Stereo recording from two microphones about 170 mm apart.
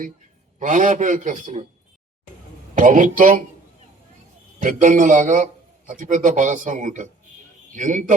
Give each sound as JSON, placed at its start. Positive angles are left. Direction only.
{"t": 0.6, "sound": "a man's voice", "side_deg": -50}
{"t": 2.7, "sound": "a man's voice", "side_deg": -50}
{"t": 4.6, "sound": "a man's voice", "side_deg": -50}